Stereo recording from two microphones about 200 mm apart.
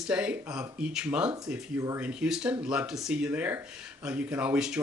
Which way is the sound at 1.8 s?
15° right (ahead or behind).